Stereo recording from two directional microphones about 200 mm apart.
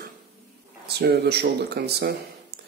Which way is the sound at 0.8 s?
55° right (ahead or behind).